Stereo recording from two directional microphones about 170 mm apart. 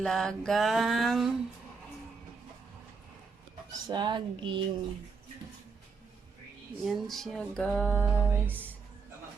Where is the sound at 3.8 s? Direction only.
25° right (ahead or behind).